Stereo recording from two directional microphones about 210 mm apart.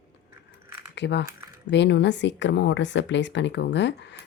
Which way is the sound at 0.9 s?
55° left (ahead or behind).